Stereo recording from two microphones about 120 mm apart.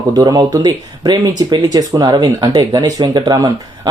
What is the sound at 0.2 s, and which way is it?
Speech, 30° right (ahead or behind).